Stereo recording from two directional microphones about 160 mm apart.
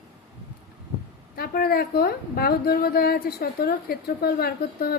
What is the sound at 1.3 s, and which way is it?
A woman's voice, 70° left (ahead or behind).